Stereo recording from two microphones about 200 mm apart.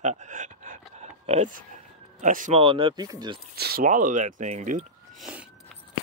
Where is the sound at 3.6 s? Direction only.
45° right (ahead or behind).